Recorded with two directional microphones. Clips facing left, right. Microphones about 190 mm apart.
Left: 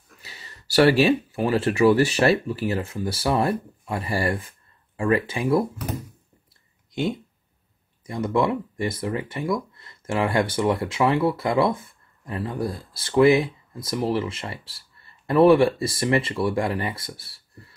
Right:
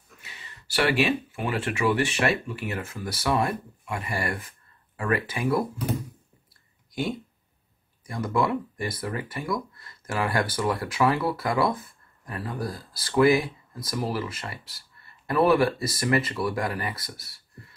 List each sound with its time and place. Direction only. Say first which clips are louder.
0.2 s speech: left 3 dB; 35° left (ahead or behind)
6.9 s a sound: left 3 dB; 25° left (ahead or behind)
8.1 s speech: left 3 dB; 25° left (ahead or behind)